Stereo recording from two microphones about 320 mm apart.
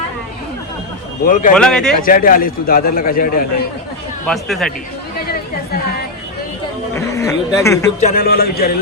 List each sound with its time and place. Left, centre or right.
1.2 s a man's voice: left
1.5 s speech: centre
2.0 s a man's voice: left
4.3 s speech: centre
6.9 s speech: centre
8.0 s a man's voice: left